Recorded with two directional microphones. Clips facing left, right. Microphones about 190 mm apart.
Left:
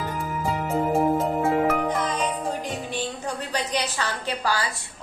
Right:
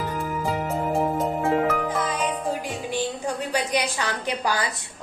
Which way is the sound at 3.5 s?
10° right (ahead or behind).